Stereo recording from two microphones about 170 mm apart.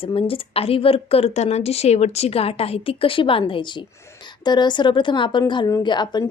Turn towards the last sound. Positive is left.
turn(degrees=25)  # may be behind; listen again after turning